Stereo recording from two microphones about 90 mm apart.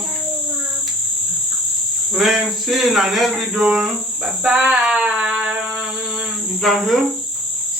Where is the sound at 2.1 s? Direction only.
Centre (ahead or behind).